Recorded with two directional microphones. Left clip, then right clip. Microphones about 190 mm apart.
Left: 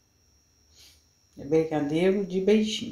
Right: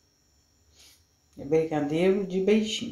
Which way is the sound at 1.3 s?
5° left (ahead or behind).